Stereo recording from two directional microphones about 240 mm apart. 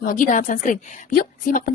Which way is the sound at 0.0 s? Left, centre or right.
Left.